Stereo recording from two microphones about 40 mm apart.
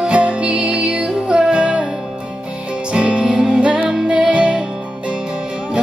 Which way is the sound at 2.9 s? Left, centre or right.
Right.